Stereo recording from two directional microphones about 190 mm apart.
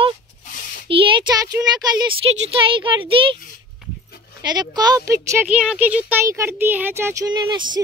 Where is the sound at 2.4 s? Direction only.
25° right (ahead or behind).